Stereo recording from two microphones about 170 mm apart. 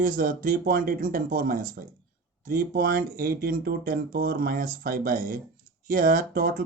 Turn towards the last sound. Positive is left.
turn(degrees=-55)  # may be behind; listen again after turning